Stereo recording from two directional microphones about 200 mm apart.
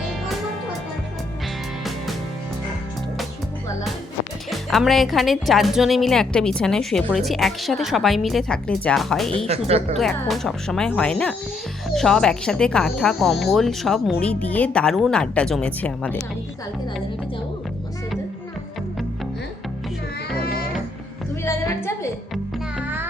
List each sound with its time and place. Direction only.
4.5 s speech: centre (ahead or behind)
9.5 s speech: 30° right (ahead or behind)
10.0 s speech: centre (ahead or behind)
21.4 s a woman's voice: 15° left (ahead or behind)